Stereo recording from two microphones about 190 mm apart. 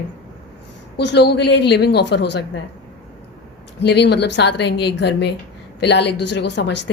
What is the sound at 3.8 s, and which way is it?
Speech, 65° left (ahead or behind).